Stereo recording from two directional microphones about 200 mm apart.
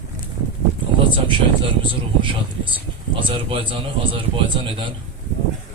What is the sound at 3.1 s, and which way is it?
A man's voice, 25° right (ahead or behind).